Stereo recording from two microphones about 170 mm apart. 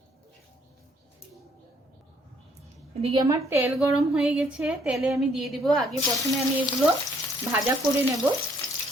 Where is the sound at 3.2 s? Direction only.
20° right (ahead or behind).